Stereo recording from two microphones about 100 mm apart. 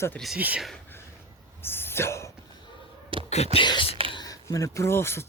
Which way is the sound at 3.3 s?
90° left.